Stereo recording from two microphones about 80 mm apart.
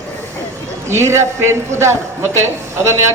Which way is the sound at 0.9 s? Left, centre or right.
Right.